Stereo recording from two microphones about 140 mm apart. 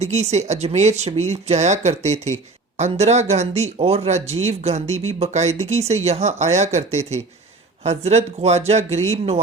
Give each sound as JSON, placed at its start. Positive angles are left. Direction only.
{"t": 0.0, "sound": "speech", "side_deg": -50}